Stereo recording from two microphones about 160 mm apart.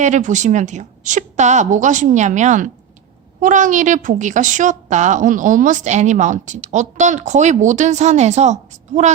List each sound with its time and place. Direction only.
0.0 s a woman's voice: 50° right (ahead or behind)